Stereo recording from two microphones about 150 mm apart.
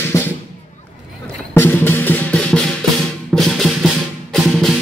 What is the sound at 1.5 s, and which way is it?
Music, 15° left (ahead or behind).